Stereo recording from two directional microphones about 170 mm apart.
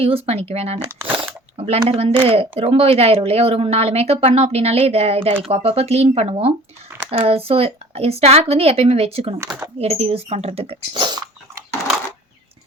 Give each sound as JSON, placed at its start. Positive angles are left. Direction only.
{"t": 0.0, "sound": "speech", "side_deg": -35}
{"t": 0.8, "sound": "speech", "side_deg": -10}
{"t": 1.1, "sound": "a sound", "side_deg": -35}
{"t": 2.2, "sound": "speech", "side_deg": -35}